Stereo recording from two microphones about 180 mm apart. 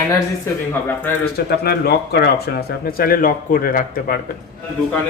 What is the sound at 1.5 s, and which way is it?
Speech, 60° left (ahead or behind).